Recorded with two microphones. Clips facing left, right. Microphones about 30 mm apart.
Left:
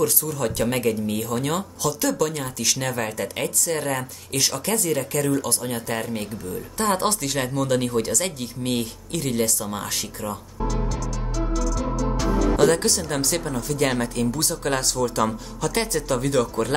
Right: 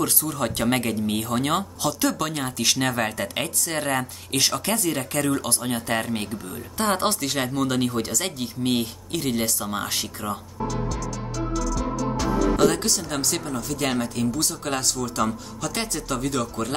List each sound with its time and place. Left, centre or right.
0.3 s speech: right
2.1 s speech: right
11.7 s speech: centre